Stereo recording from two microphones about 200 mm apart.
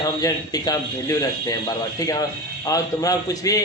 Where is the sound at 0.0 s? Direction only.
20° left (ahead or behind).